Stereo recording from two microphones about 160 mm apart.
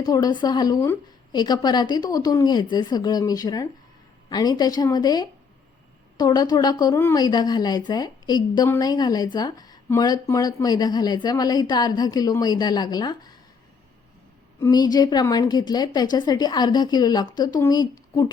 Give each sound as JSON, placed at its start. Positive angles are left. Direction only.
{"t": 0.0, "sound": "speech", "side_deg": 25}
{"t": 14.6, "sound": "speech", "side_deg": 25}